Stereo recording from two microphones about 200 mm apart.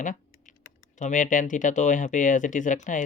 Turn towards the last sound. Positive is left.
turn(degrees=40)  # may be behind; listen again after turning